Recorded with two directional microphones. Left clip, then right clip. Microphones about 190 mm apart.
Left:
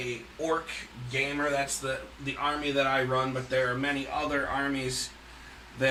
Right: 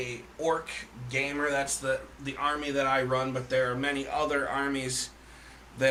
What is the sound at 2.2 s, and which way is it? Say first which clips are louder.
Speech: left 3 dB; 10° right (ahead or behind).